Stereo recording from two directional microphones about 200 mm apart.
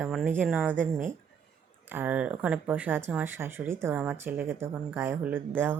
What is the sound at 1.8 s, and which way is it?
Speech, 10° right (ahead or behind).